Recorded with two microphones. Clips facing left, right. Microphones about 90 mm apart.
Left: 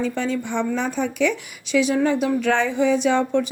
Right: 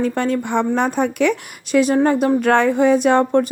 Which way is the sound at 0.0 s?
55° right (ahead or behind).